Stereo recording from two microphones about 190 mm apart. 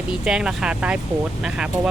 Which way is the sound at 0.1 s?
5° right (ahead or behind).